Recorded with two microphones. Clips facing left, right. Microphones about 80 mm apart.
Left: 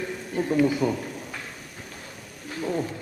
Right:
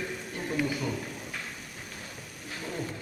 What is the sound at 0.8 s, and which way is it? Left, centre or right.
Speech, left.